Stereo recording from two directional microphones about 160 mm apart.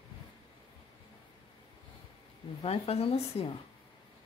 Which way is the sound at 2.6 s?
40° left (ahead or behind).